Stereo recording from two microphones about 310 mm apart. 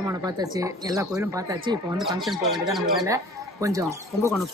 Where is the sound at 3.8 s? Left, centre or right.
Centre.